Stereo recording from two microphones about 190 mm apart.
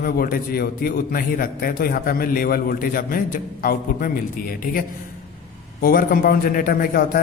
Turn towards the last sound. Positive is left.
turn(degrees=50)  # may be behind; listen again after turning